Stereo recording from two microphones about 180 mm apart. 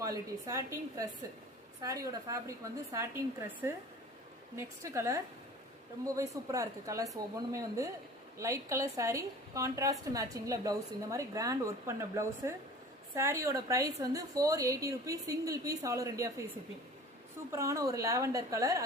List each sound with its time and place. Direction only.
0.0 s a woman's voice: 20° right (ahead or behind)
17.5 s a woman's voice: 15° right (ahead or behind)